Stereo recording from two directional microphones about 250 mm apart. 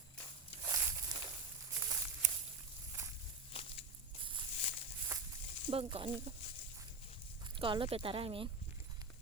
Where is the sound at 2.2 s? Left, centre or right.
Right.